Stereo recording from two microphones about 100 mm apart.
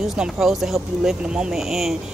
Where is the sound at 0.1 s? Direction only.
5° right (ahead or behind).